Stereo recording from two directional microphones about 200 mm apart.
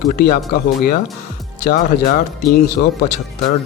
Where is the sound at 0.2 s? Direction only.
50° left (ahead or behind).